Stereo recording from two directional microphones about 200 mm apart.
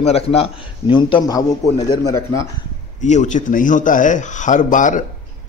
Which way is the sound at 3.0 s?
35° left (ahead or behind).